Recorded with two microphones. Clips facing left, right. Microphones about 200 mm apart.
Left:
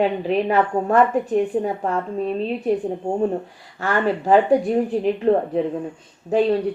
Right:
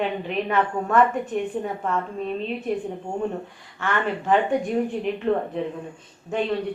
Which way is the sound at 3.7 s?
35° left (ahead or behind).